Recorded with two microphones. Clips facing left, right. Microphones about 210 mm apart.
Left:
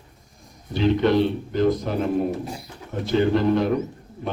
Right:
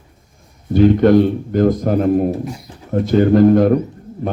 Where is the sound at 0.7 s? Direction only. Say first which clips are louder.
Right 8 dB; 50° right (ahead or behind).